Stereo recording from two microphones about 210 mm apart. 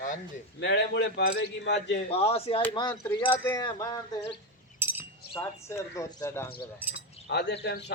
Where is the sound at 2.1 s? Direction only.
30° left (ahead or behind).